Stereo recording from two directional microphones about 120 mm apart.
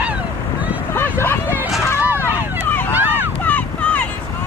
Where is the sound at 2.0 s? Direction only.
15° right (ahead or behind).